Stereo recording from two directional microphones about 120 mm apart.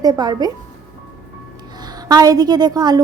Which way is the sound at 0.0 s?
35° right (ahead or behind).